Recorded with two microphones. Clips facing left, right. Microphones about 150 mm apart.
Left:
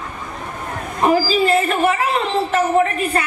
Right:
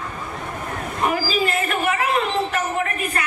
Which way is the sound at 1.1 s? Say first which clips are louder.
Left 9 dB; 30° left (ahead or behind).